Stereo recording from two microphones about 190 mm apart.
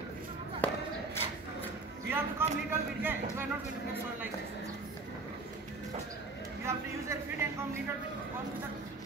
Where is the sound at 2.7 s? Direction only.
10° right (ahead or behind).